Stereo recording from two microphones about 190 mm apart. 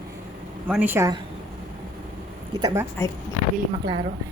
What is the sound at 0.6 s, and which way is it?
Speech, 10° right (ahead or behind).